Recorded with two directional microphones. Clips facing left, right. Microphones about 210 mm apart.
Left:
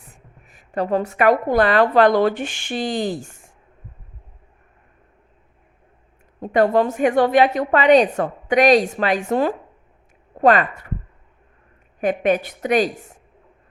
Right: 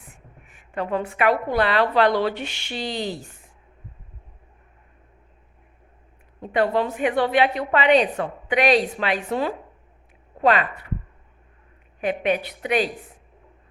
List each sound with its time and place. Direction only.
0.4 s a woman's voice: 40° left (ahead or behind)
6.4 s a woman's voice: 45° left (ahead or behind)
11.9 s a woman's voice: 45° left (ahead or behind)